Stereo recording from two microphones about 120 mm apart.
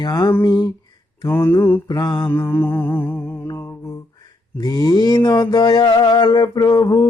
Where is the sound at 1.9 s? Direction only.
35° left (ahead or behind).